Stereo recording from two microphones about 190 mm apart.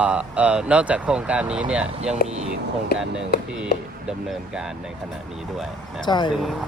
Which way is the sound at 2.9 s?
55° left (ahead or behind).